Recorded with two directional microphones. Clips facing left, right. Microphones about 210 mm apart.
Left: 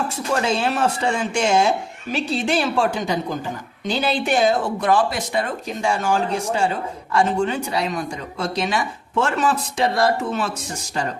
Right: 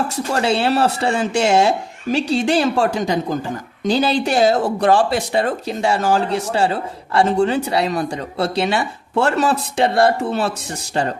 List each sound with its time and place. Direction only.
0.4 s speech: 35° right (ahead or behind)